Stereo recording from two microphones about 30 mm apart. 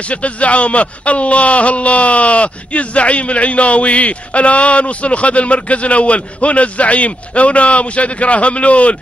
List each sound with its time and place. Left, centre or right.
0.0 s speech: left